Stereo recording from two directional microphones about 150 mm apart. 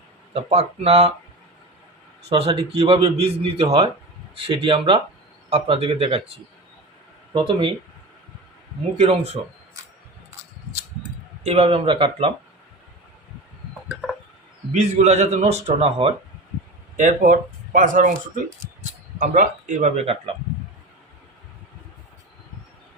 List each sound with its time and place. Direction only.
0.3 s speech: 45° right (ahead or behind)
2.3 s a man's voice: 40° right (ahead or behind)
7.3 s a man's voice: 35° right (ahead or behind)
9.0 s speech: 45° right (ahead or behind)
11.4 s a man's voice: 45° right (ahead or behind)
14.7 s speech: 50° right (ahead or behind)
17.0 s speech: 55° right (ahead or behind)